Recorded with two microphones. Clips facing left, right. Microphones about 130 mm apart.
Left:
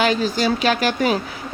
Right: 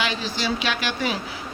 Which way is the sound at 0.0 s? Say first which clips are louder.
Left 8 dB; 45° left (ahead or behind).